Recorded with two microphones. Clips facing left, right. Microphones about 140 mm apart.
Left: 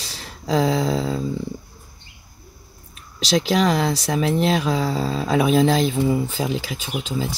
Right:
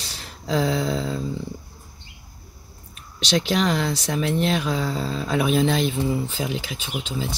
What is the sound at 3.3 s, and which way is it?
Speech, 35° left (ahead or behind).